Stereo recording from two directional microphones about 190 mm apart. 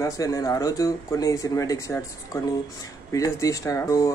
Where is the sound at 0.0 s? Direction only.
15° left (ahead or behind).